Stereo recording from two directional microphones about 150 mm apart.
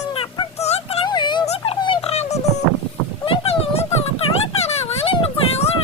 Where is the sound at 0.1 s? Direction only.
35° left (ahead or behind).